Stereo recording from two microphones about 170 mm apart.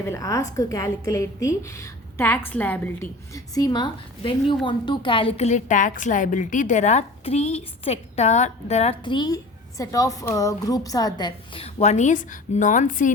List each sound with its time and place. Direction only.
0.0 s a woman's voice: 20° left (ahead or behind); by 13.1 s 50° left (ahead or behind)